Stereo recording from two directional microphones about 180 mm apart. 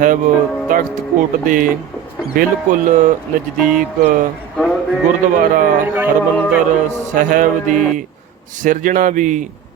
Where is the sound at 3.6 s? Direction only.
5° right (ahead or behind).